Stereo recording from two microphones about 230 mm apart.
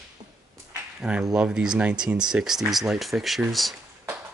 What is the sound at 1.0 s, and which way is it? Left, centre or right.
Speech, centre.